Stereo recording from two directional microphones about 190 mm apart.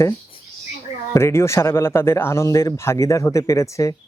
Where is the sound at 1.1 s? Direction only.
15° left (ahead or behind).